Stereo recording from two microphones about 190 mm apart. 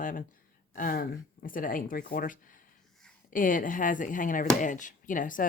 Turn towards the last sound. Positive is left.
turn(degrees=45)  # may be behind; listen again after turning